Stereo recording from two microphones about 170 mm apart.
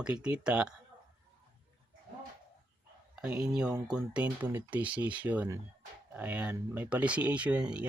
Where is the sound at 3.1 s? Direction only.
5° right (ahead or behind).